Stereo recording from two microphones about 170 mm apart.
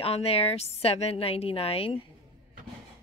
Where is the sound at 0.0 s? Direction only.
35° left (ahead or behind).